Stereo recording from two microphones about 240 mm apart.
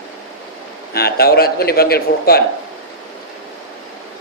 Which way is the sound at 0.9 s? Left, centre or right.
Left.